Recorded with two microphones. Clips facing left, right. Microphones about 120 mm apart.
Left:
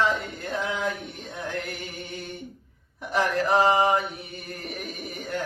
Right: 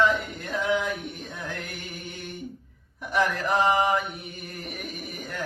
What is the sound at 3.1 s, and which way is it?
Mantra, 30° left (ahead or behind).